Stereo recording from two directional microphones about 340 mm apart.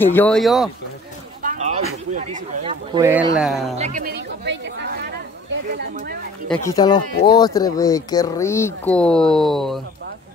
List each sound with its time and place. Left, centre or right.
0.0 s speech: centre
1.4 s a sound: right
2.1 s speech: right; by 3.7 s centre
3.7 s chatter: right
6.5 s speech: centre